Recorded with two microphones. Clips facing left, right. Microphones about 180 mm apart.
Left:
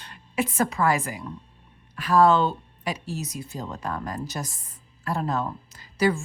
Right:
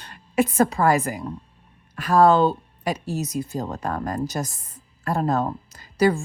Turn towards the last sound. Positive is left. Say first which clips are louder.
# right 4 dB
turn(degrees=-40)  # may be behind; listen again after turning